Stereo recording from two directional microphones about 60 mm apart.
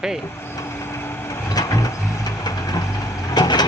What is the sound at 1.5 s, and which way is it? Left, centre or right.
Vehicle, left.